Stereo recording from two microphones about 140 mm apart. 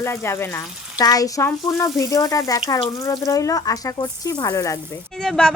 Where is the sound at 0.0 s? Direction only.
20° left (ahead or behind).